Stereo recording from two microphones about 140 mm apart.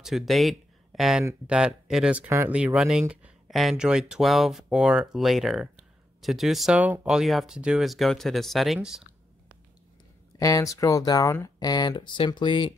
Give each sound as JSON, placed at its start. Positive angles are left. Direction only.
{"t": 0.0, "sound": "speech", "side_deg": 0}
{"t": 10.3, "sound": "speech", "side_deg": 25}